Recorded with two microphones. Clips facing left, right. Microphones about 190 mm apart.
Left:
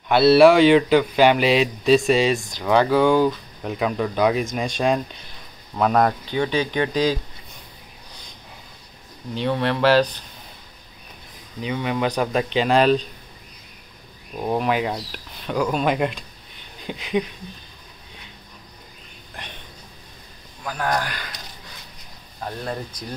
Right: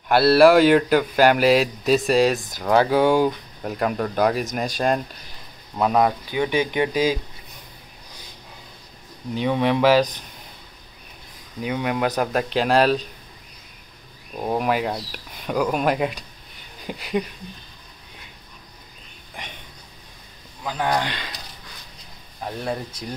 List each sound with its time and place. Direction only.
0.1 s speech: centre (ahead or behind)
9.3 s speech: 10° right (ahead or behind)
11.6 s speech: 5° right (ahead or behind)
14.4 s speech: 5° right (ahead or behind)
20.6 s speech: 20° right (ahead or behind)